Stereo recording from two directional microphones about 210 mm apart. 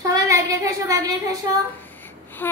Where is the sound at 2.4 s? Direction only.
10° left (ahead or behind).